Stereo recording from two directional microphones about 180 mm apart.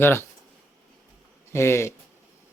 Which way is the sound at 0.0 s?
15° left (ahead or behind).